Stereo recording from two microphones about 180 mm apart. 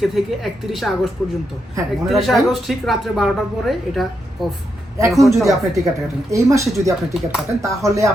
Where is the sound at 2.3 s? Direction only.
Centre (ahead or behind).